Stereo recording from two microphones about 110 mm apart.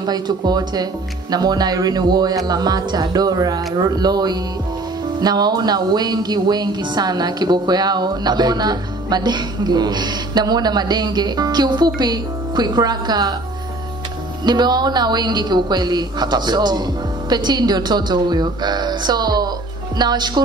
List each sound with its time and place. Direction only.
0.0 s a woman's voice: 40° right (ahead or behind)
14.4 s a woman's voice: 40° right (ahead or behind)